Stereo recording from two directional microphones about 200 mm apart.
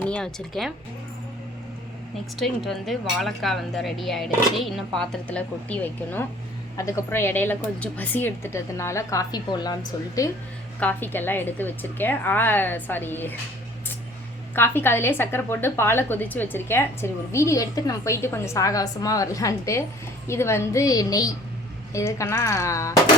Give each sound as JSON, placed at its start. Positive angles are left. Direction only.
{"t": 0.0, "sound": "speech", "side_deg": 5}
{"t": 2.3, "sound": "a woman's voice", "side_deg": 0}
{"t": 14.5, "sound": "a woman's voice", "side_deg": 10}